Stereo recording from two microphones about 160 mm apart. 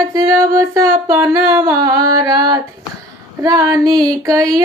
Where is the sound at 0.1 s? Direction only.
20° right (ahead or behind).